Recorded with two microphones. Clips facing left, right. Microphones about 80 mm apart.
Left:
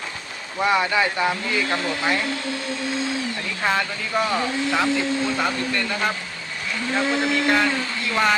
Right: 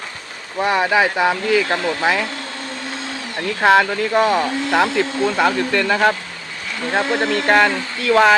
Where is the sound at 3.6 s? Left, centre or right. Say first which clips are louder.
Right 10 dB; right.